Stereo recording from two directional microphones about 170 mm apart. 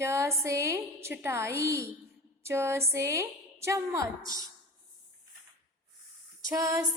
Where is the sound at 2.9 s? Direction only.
15° right (ahead or behind).